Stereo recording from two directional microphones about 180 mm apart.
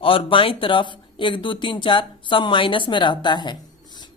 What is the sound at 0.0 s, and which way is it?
Speech, 30° left (ahead or behind).